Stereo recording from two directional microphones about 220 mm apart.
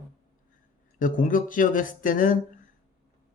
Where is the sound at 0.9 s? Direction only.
40° left (ahead or behind).